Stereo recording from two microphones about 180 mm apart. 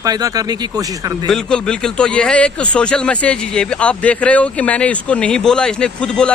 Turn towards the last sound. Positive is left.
turn(degrees=5)  # may be behind; listen again after turning